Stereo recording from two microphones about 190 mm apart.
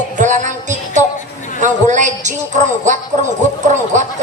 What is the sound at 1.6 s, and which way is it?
Speech, 40° right (ahead or behind).